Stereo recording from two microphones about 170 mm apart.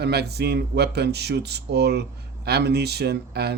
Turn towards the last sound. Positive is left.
turn(degrees=-75)  # may be behind; listen again after turning